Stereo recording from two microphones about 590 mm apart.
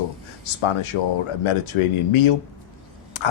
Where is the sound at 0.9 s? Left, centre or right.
Left.